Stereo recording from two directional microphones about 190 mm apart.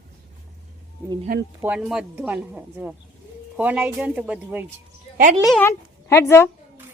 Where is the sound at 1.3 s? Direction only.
50° right (ahead or behind).